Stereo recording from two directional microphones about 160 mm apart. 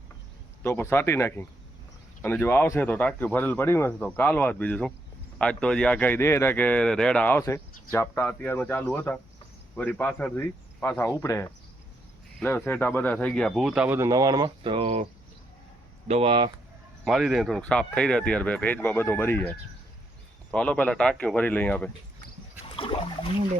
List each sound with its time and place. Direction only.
0.6 s speech: 15° left (ahead or behind); by 15.0 s 35° right (ahead or behind)
16.0 s speech: 35° right (ahead or behind)
17.0 s speech: centre (ahead or behind)
22.7 s a sound: 35° left (ahead or behind)